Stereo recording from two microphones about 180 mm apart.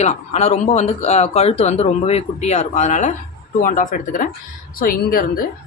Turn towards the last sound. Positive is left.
turn(degrees=55)  # may be behind; listen again after turning